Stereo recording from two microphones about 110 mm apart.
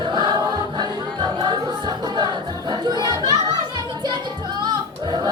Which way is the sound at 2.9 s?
35° right (ahead or behind).